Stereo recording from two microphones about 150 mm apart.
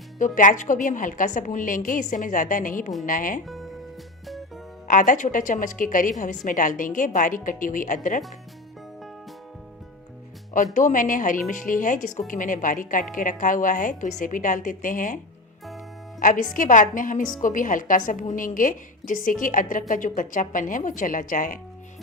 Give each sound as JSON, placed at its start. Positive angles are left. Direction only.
{"t": 0.2, "sound": "a woman's voice", "side_deg": 60}
{"t": 3.4, "sound": "music", "side_deg": 0}
{"t": 4.9, "sound": "a woman's voice", "side_deg": 60}
{"t": 10.8, "sound": "a woman's voice", "side_deg": 60}
{"t": 16.2, "sound": "a woman's voice", "side_deg": 65}